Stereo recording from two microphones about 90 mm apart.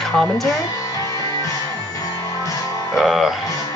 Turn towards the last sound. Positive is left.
turn(degrees=-5)  # may be behind; listen again after turning